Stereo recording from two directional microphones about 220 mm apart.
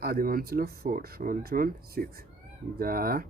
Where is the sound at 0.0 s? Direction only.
45° right (ahead or behind).